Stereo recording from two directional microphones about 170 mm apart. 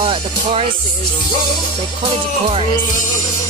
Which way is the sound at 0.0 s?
35° right (ahead or behind).